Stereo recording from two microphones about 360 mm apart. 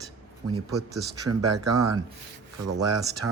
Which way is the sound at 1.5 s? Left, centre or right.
Right.